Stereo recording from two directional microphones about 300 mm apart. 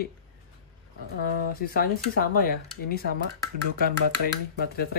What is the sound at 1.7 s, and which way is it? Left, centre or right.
Speech, left.